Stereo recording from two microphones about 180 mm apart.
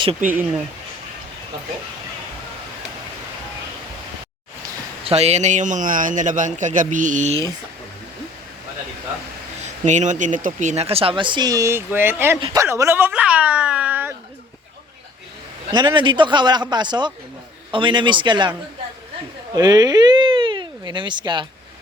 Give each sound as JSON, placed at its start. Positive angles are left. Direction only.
{"t": 0.3, "sound": "speech", "side_deg": -10}
{"t": 5.0, "sound": "a man's voice", "side_deg": -35}
{"t": 9.6, "sound": "speech", "side_deg": -40}
{"t": 15.7, "sound": "speech", "side_deg": -25}
{"t": 19.5, "sound": "speech", "side_deg": -20}